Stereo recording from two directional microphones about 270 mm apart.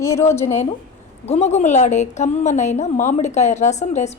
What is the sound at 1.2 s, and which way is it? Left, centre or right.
A woman's voice, left.